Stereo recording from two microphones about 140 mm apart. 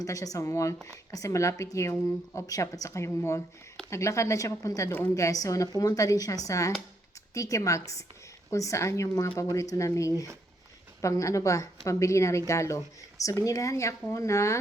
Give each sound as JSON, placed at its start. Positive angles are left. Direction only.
{"t": 0.0, "sound": "a woman's voice", "side_deg": 25}